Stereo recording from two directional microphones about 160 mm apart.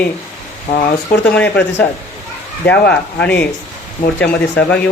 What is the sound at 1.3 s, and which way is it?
Speech, 10° left (ahead or behind).